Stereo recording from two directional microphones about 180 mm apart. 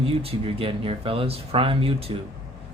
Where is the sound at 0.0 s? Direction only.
30° right (ahead or behind).